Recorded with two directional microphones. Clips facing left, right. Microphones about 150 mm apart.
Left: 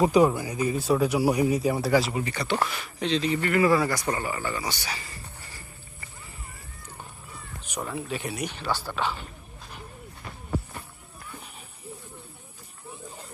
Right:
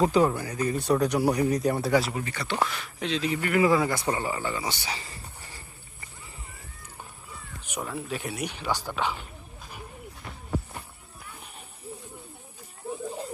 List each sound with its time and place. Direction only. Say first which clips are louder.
0.0 s a man's voice: left 2 dB; 10° left (ahead or behind)
2.2 s a man's voice: left 4 dB; 15° left (ahead or behind)
2.6 s speech: left 3 dB; 5° left (ahead or behind); by 5.1 s 25° right (ahead or behind)
7.7 s speech: left 1 dB; centre (ahead or behind)
8.4 s speech: even; 10° right (ahead or behind)